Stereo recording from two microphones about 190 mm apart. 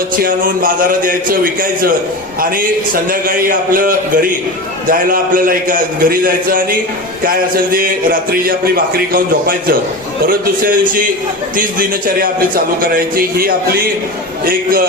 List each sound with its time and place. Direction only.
0.2 s a man's voice: 45° right (ahead or behind)